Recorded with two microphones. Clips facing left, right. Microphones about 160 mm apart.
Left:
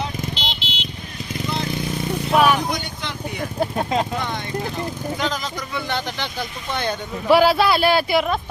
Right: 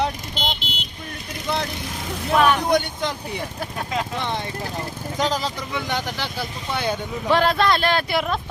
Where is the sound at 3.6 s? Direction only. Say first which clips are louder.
Left 8 dB; 30° left (ahead or behind).